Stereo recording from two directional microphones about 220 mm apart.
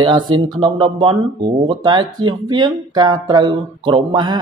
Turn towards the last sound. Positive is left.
turn(degrees=-20)  # may be behind; listen again after turning